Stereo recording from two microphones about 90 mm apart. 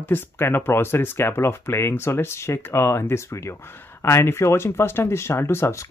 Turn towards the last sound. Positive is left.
turn(degrees=25)  # may be behind; listen again after turning